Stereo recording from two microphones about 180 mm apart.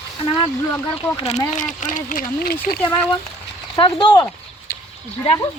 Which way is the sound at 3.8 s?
25° left (ahead or behind).